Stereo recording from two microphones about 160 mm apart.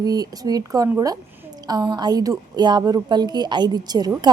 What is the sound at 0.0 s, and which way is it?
A woman's voice, 25° right (ahead or behind).